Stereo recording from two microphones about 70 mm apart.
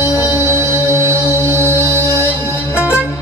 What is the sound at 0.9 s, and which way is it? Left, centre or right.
Music, right.